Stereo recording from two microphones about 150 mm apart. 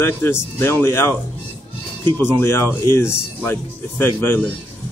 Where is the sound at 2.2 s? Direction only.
15° left (ahead or behind).